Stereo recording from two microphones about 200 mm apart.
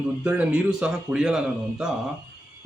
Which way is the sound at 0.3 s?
5° right (ahead or behind).